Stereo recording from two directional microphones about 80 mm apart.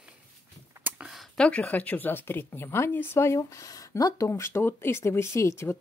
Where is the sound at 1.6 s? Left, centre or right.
Left.